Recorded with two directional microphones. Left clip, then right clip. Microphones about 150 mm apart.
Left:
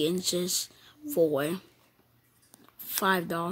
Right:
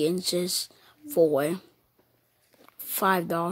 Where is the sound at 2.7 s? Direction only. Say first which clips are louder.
Right 3 dB; 25° right (ahead or behind).